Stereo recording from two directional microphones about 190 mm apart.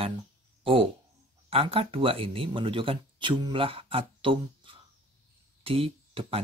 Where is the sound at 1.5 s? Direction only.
30° right (ahead or behind).